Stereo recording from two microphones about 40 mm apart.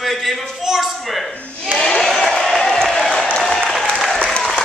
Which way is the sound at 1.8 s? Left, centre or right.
Centre.